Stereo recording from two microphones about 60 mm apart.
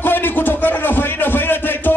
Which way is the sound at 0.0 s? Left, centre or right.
Left.